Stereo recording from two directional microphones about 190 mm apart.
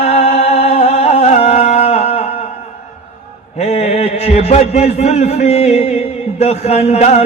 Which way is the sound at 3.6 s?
35° left (ahead or behind).